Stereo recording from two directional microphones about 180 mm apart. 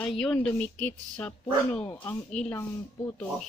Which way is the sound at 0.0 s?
5° left (ahead or behind).